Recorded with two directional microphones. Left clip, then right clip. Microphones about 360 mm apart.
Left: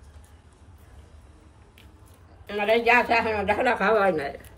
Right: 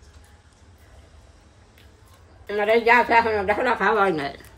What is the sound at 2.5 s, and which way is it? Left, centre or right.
A woman's voice, centre.